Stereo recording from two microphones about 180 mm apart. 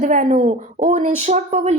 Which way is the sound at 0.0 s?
45° right (ahead or behind).